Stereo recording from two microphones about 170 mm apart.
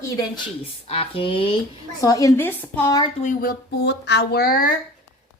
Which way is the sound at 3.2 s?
65° left (ahead or behind).